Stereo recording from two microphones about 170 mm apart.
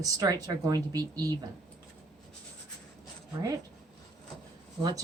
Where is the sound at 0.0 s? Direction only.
20° right (ahead or behind).